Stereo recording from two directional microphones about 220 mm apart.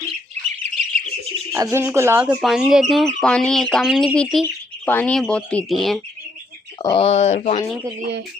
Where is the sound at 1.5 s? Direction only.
15° right (ahead or behind).